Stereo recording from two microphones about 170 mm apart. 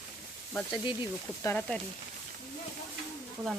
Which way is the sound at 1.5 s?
5° left (ahead or behind).